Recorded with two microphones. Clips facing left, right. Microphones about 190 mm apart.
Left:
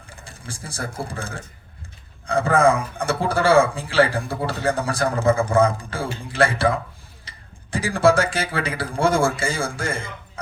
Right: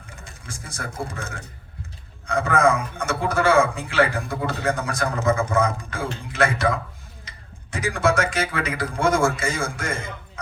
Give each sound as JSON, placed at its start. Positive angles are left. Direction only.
{"t": 0.1, "sound": "a man's voice", "side_deg": 30}